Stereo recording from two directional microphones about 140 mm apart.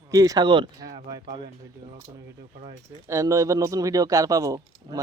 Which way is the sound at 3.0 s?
20° right (ahead or behind).